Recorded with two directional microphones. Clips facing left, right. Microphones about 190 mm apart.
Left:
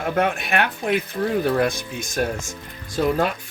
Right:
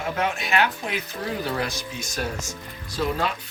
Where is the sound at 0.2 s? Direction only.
55° left (ahead or behind).